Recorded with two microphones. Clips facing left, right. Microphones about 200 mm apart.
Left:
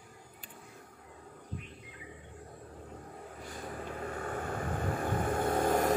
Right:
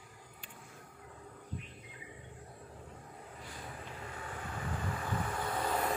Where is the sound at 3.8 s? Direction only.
50° left (ahead or behind).